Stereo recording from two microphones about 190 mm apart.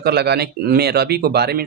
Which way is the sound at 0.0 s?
60° right (ahead or behind).